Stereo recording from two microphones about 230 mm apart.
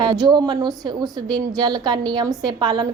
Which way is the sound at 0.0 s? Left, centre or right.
Centre.